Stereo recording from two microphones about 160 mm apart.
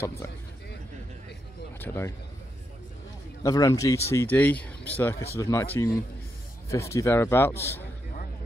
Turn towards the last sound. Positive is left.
turn(degrees=15)  # may be behind; listen again after turning